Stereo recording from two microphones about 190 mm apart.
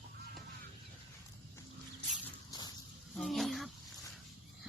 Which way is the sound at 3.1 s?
Centre (ahead or behind).